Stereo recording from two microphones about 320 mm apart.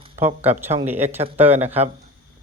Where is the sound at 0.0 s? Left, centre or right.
Centre.